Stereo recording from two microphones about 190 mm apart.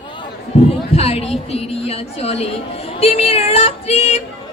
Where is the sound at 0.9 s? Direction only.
35° left (ahead or behind).